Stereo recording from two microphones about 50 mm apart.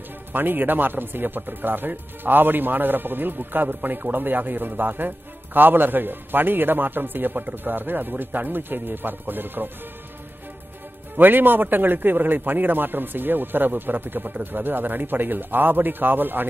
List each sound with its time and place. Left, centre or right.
0.3 s speech: right
11.1 s speech: right